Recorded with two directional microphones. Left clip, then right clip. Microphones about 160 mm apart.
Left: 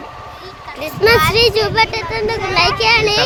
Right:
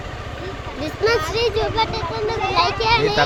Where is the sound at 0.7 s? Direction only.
35° left (ahead or behind).